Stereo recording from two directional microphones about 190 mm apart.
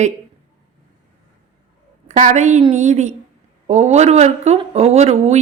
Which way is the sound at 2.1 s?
40° right (ahead or behind).